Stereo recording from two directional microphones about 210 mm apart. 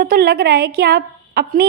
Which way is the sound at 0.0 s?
50° right (ahead or behind).